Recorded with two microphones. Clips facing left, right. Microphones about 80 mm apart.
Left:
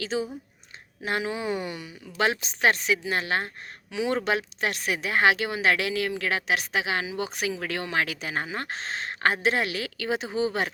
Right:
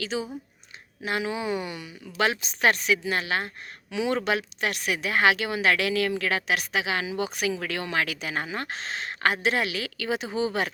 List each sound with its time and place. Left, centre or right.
1.0 s speech: left